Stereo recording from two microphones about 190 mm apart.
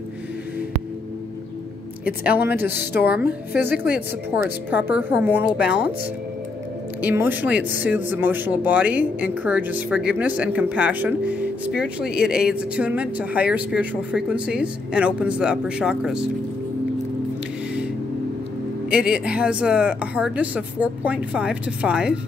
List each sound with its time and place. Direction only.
2.0 s speech: 10° right (ahead or behind)
2.7 s a woman's voice: 60° left (ahead or behind)
3.2 s speech: 10° right (ahead or behind)
7.0 s speech: 10° right (ahead or behind)
18.9 s speech: 5° right (ahead or behind)